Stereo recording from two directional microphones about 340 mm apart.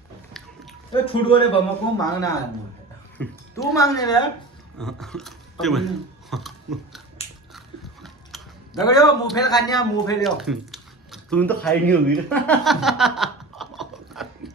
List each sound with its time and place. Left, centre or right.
1.0 s a man's voice: centre
6.3 s a sound: centre
7.2 s biting: centre
7.5 s biting: centre
8.8 s a man's voice: centre
10.2 s a sound: centre